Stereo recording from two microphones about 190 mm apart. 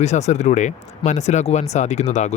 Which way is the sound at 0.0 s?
35° left (ahead or behind).